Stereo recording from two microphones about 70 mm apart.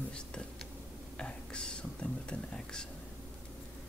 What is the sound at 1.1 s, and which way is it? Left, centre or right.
Speech, centre.